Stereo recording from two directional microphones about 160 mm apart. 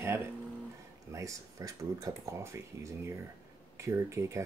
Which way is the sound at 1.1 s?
20° right (ahead or behind).